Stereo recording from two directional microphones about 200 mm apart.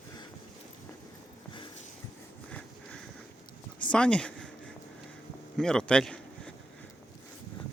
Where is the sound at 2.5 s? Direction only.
5° left (ahead or behind).